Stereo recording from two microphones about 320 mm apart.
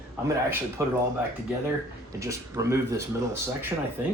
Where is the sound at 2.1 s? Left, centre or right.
Centre.